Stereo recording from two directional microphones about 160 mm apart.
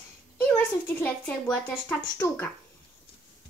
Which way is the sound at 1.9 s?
15° left (ahead or behind).